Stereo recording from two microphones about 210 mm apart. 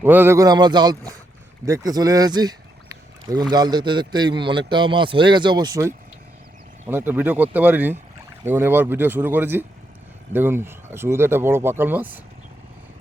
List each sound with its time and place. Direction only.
0.0 s a man's voice: 10° right (ahead or behind)